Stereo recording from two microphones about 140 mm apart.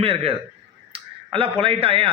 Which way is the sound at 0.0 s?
40° right (ahead or behind).